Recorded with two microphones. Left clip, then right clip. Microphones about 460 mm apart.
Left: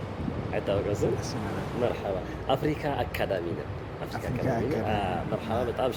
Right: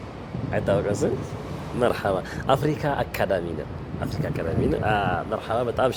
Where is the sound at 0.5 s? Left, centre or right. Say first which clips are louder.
Right 5 dB; right.